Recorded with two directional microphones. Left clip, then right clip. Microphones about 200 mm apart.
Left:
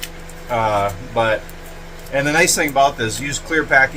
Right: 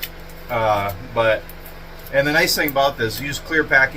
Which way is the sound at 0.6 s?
35° left (ahead or behind).